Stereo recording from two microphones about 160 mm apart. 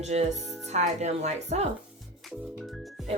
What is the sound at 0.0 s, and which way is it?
Speech, 45° right (ahead or behind).